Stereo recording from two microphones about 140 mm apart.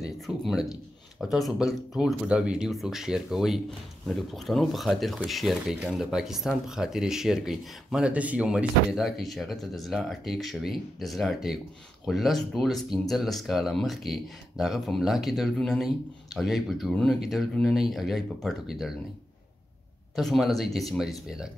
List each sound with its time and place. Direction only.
0.0 s speech: centre (ahead or behind)
20.2 s speech: centre (ahead or behind)